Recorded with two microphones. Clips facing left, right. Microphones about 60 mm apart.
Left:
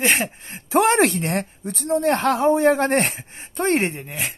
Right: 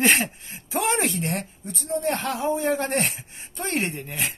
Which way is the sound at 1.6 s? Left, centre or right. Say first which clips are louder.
Left 7 dB; left.